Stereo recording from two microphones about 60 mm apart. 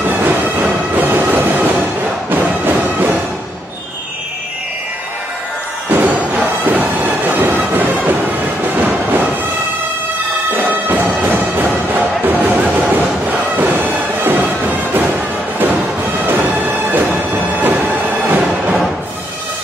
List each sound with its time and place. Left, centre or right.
0.0 s train: right
2.3 s music: right
5.9 s music: right
6.3 s bagpipes: right
7.4 s a sound: right
7.8 s thunder: right
8.7 s music: right
10.5 s music: right
16.2 s music: right
17.6 s music: right